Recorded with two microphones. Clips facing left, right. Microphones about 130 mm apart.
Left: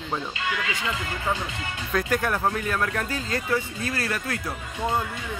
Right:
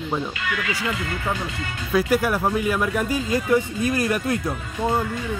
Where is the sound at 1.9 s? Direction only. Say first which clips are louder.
Right 5 dB; 10° right (ahead or behind).